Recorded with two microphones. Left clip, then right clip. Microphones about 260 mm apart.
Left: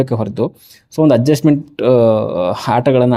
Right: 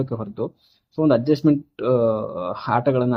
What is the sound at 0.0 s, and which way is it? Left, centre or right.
Speech, left.